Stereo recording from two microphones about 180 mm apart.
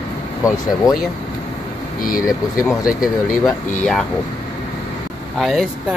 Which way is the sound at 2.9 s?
5° right (ahead or behind).